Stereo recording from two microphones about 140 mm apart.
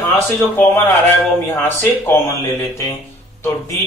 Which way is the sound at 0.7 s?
15° left (ahead or behind).